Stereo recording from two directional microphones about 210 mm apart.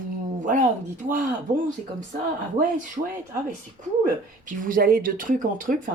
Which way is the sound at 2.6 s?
40° right (ahead or behind).